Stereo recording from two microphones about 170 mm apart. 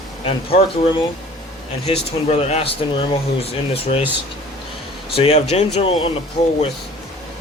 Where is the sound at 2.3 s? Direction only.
40° left (ahead or behind).